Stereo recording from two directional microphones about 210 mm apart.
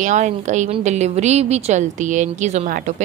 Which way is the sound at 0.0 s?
35° right (ahead or behind).